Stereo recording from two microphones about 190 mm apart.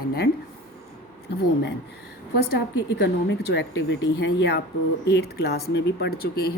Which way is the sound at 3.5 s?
65° left (ahead or behind).